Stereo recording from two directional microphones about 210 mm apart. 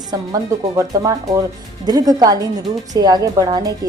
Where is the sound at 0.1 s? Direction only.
15° right (ahead or behind).